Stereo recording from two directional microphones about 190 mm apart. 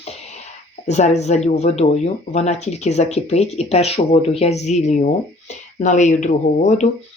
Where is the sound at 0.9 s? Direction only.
35° left (ahead or behind).